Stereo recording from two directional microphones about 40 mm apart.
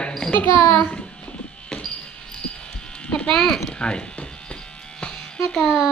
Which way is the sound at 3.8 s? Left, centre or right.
Left.